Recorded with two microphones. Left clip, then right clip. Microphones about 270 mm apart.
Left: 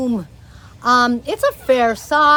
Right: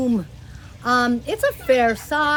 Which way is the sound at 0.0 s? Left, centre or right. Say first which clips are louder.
Left 1 dB; centre.